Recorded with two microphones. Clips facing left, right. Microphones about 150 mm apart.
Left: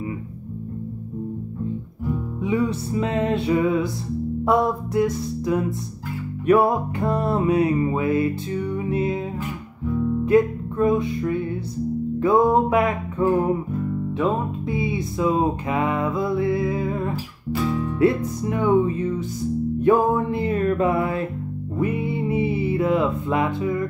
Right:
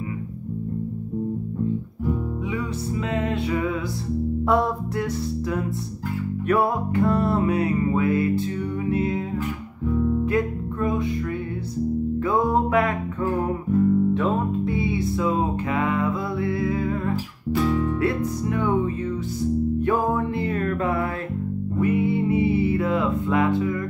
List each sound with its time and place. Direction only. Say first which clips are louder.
2.4 s music: left 5 dB; 30° left (ahead or behind)
4.5 s music: left 3 dB; 15° left (ahead or behind)
10.2 s music: left 5 dB; 20° left (ahead or behind)